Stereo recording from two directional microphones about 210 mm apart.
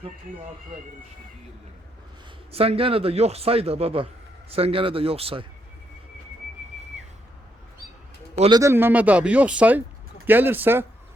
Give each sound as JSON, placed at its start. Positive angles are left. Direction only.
{"t": 2.5, "sound": "speech", "side_deg": -30}
{"t": 8.4, "sound": "speech", "side_deg": -20}